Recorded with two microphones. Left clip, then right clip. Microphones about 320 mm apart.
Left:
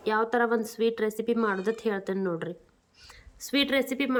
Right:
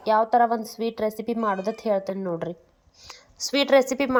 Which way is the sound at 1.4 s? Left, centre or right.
Centre.